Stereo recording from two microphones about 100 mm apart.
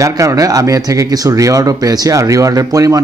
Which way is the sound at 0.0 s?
30° right (ahead or behind).